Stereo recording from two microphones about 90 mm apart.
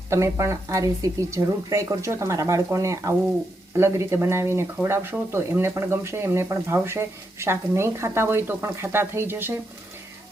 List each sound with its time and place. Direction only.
0.1 s speech: 30° right (ahead or behind)